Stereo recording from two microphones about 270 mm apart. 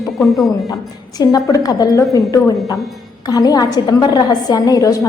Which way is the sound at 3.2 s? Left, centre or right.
Centre.